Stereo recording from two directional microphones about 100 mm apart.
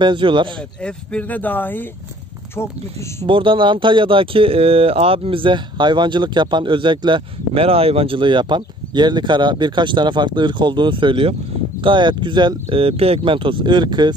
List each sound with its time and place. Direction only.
0.0 s speech: 50° right (ahead or behind)
0.6 s speech: 10° left (ahead or behind); by 3.3 s 25° left (ahead or behind)
3.3 s speech: 60° right (ahead or behind)